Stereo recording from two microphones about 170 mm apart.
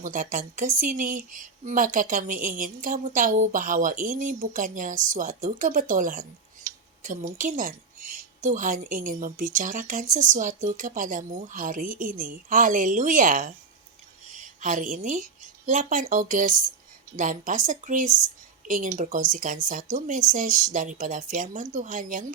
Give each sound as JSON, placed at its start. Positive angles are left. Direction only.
{"t": 0.0, "sound": "a woman's voice", "side_deg": -50}